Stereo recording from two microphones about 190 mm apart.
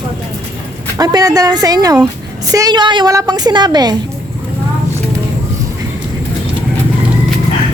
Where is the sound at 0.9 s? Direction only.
20° right (ahead or behind).